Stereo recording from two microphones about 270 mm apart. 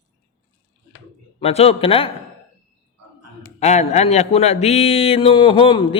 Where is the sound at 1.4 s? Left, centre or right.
Left.